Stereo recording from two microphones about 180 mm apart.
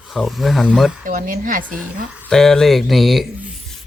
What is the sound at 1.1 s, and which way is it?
Speech, 50° right (ahead or behind).